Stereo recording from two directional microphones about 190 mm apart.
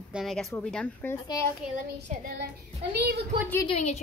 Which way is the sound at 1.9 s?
35° right (ahead or behind).